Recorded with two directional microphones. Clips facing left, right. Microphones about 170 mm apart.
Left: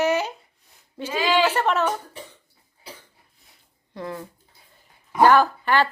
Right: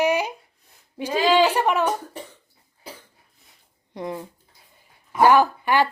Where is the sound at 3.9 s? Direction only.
20° right (ahead or behind).